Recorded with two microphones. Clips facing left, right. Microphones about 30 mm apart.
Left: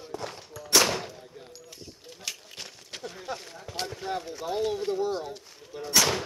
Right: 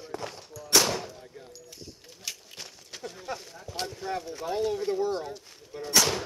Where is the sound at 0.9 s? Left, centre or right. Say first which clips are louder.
Left 1 dB; centre.